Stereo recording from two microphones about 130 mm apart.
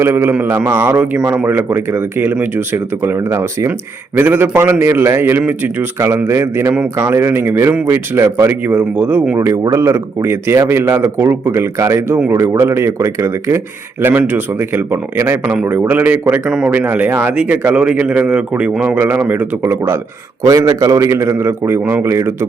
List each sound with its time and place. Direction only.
0.0 s speech: 20° right (ahead or behind)